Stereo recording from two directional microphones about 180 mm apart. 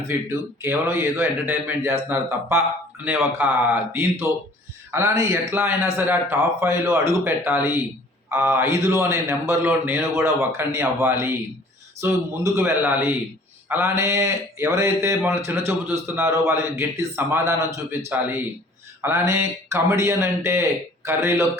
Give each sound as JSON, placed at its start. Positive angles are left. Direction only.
{"t": 0.1, "sound": "a man's voice", "side_deg": -15}
{"t": 4.9, "sound": "a man's voice", "side_deg": -15}